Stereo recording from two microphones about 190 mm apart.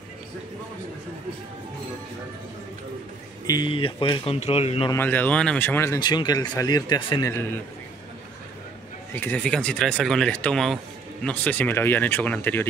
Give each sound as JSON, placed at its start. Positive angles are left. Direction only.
{"t": 3.4, "sound": "speech", "side_deg": 25}
{"t": 4.9, "sound": "speech", "side_deg": 10}
{"t": 5.9, "sound": "speech", "side_deg": 25}
{"t": 9.1, "sound": "speech", "side_deg": 10}